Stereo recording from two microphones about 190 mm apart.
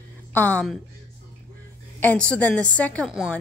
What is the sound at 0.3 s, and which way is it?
Speech, 10° left (ahead or behind).